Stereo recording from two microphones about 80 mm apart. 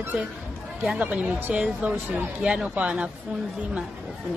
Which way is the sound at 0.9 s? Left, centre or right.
Centre.